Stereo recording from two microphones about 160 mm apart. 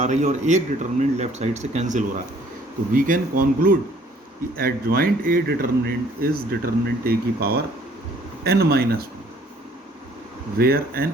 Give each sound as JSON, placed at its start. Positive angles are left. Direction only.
{"t": 0.0, "sound": "speech", "side_deg": -50}
{"t": 2.9, "sound": "speech", "side_deg": -60}
{"t": 10.6, "sound": "speech", "side_deg": -75}